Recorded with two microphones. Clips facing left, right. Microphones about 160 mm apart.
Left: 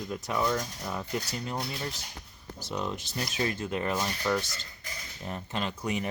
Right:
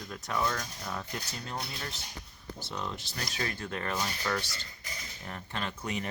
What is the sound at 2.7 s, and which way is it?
Speech, 15° left (ahead or behind).